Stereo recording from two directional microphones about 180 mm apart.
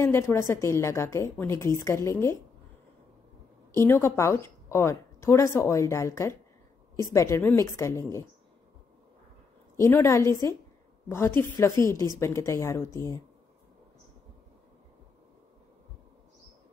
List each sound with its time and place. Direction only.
0.0 s a woman's voice: 15° left (ahead or behind)
3.7 s a woman's voice: 15° left (ahead or behind)
9.8 s a woman's voice: 15° left (ahead or behind)